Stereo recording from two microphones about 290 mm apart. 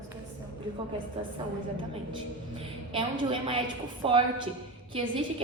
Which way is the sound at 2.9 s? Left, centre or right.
Centre.